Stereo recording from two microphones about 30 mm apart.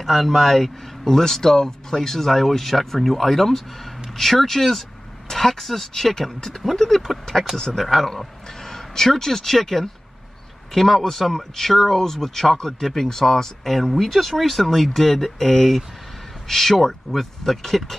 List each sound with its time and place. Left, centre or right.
0.0 s speech: centre
7.5 s speech: centre
7.8 s speech: centre